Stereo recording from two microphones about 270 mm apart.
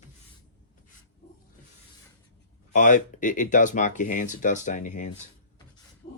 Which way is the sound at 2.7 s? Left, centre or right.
Left.